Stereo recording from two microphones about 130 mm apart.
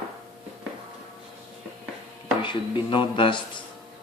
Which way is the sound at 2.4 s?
40° left (ahead or behind).